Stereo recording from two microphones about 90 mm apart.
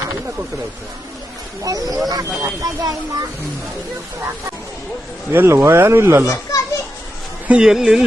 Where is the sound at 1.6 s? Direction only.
40° right (ahead or behind).